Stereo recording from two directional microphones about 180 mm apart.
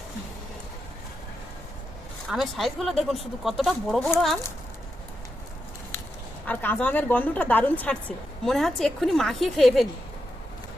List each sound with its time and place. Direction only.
2.3 s speech: centre (ahead or behind)
6.4 s a woman's voice: 10° left (ahead or behind)